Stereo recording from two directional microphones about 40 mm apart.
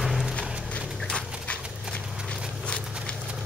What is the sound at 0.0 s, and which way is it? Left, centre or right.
Clip-clop, centre.